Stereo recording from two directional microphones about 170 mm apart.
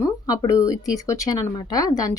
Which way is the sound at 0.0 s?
20° left (ahead or behind).